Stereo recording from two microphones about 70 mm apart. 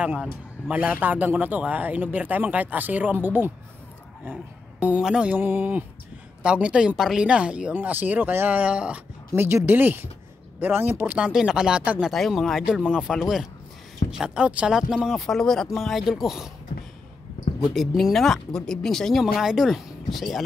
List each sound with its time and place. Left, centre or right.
0.7 s speech: right
5.0 s speech: centre
5.3 s speech: right
6.4 s speech: centre
7.7 s speech: right
9.3 s speech: right
11.3 s speech: centre
12.1 s speech: centre
15.0 s speech: centre
17.7 s speech: centre